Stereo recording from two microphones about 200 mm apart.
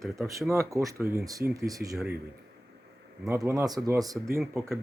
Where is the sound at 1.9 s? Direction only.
5° right (ahead or behind).